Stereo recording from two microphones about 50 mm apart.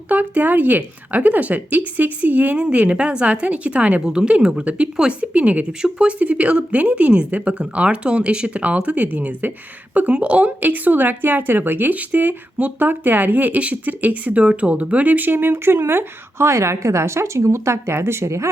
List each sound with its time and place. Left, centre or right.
0.1 s a woman's voice: right